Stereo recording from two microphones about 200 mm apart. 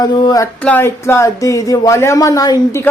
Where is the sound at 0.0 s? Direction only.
20° left (ahead or behind).